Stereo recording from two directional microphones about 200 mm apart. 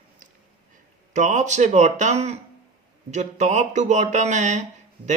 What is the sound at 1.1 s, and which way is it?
Speech, 35° right (ahead or behind).